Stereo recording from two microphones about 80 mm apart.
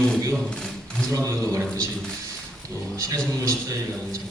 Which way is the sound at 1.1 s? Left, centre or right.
Right.